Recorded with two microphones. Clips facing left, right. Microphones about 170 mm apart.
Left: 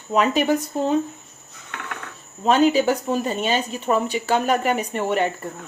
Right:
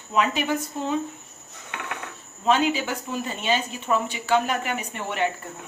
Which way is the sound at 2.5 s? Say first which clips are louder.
Left 6 dB; 40° left (ahead or behind).